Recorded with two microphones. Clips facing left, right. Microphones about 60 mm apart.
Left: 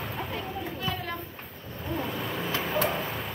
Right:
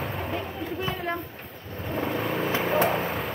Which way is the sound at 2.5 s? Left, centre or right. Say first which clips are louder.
Right 4 dB; right.